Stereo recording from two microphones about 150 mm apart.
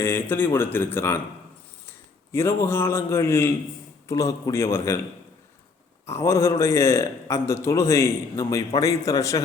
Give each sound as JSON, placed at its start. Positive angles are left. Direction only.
{"t": 0.0, "sound": "a man's voice", "side_deg": 15}
{"t": 6.1, "sound": "a man's voice", "side_deg": 20}